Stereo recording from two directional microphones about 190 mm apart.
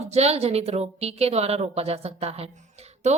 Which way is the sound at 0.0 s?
35° right (ahead or behind).